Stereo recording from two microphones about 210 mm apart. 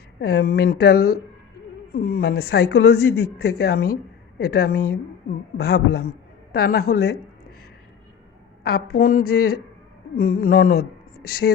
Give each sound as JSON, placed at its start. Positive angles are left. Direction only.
{"t": 0.2, "sound": "a man's voice", "side_deg": 50}
{"t": 8.6, "sound": "a man's voice", "side_deg": 50}
{"t": 10.2, "sound": "a sound", "side_deg": 45}